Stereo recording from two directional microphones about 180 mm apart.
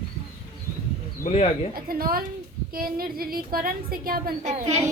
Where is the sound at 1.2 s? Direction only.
35° left (ahead or behind).